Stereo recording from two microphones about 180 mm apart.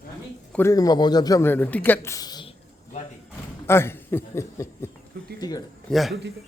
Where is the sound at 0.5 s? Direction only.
15° left (ahead or behind).